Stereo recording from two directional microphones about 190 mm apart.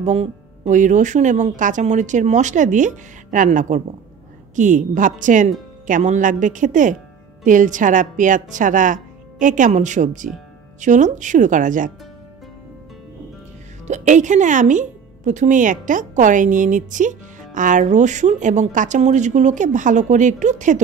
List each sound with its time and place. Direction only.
0.0 s a woman's voice: 35° right (ahead or behind)
13.8 s speech: 40° right (ahead or behind)